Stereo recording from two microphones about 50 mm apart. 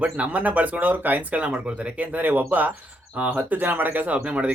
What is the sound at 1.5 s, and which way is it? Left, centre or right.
Speech, right.